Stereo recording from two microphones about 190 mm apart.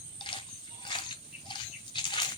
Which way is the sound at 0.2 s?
25° left (ahead or behind).